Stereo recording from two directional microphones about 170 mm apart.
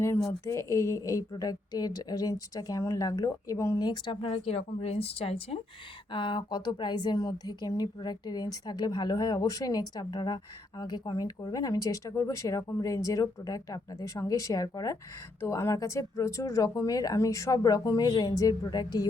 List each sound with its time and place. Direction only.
0.4 s a woman's voice: 20° left (ahead or behind)